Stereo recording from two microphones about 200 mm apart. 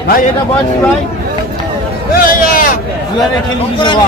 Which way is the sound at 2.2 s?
45° left (ahead or behind).